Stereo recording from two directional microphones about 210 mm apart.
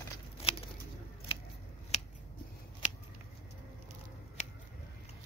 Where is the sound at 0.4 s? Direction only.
25° left (ahead or behind).